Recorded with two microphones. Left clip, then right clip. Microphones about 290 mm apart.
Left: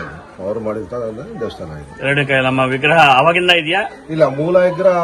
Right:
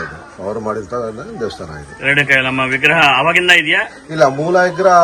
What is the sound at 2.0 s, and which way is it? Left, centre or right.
A man's voice, centre.